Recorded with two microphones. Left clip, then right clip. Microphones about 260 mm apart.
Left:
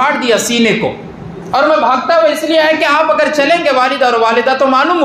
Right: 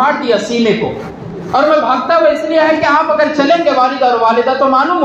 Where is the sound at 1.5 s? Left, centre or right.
Left.